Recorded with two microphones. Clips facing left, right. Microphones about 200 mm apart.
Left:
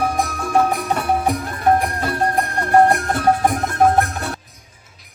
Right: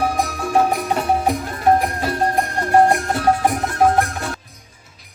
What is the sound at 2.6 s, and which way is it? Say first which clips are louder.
Music: left 1 dB; 55° left (ahead or behind).